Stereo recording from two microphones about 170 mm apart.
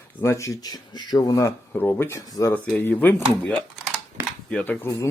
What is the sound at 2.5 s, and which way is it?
Speech, 10° left (ahead or behind).